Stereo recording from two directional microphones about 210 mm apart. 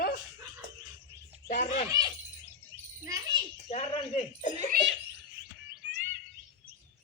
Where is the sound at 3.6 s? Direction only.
30° left (ahead or behind).